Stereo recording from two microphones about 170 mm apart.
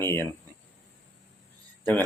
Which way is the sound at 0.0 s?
15° left (ahead or behind).